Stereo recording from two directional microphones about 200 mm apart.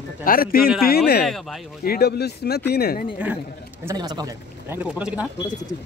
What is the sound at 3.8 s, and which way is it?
Speech, 20° right (ahead or behind).